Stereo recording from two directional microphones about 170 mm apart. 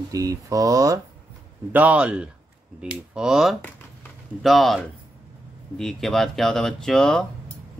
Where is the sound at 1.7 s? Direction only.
10° right (ahead or behind).